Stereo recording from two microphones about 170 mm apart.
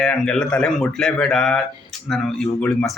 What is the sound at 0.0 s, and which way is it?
Speech, 5° left (ahead or behind).